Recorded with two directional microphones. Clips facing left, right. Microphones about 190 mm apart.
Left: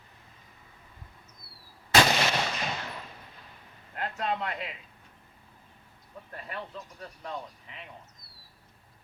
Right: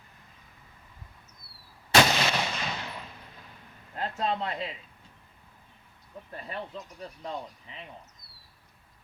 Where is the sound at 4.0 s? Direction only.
30° right (ahead or behind).